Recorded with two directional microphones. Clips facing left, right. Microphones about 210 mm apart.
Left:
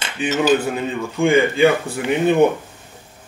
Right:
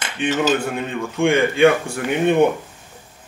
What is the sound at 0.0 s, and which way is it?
Cutlery, 5° left (ahead or behind).